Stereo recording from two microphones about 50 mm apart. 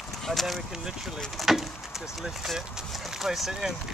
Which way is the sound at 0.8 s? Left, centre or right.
Centre.